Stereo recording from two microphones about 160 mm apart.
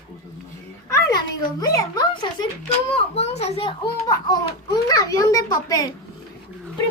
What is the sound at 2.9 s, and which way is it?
A child's voice, 40° left (ahead or behind).